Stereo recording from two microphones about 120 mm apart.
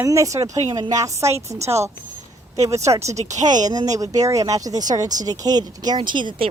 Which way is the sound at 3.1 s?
75° right (ahead or behind).